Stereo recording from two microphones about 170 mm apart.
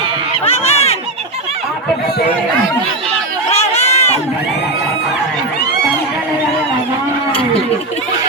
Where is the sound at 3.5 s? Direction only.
40° left (ahead or behind).